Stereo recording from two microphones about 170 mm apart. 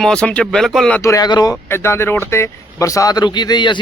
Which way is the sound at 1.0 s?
20° left (ahead or behind).